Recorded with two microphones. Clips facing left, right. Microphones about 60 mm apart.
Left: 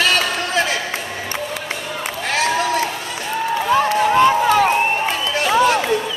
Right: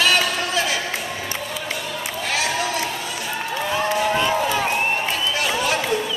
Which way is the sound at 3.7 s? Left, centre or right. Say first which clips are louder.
Left 5 dB; left.